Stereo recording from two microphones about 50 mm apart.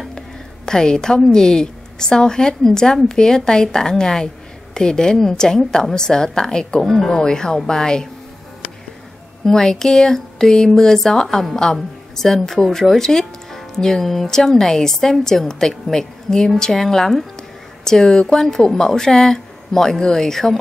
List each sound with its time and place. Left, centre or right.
0.7 s speech: centre
9.4 s speech: centre